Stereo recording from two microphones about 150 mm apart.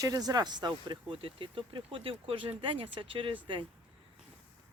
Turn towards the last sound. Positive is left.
turn(degrees=-35)  # may be behind; listen again after turning